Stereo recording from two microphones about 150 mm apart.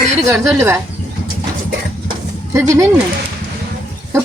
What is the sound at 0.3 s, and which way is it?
Speech, 15° right (ahead or behind).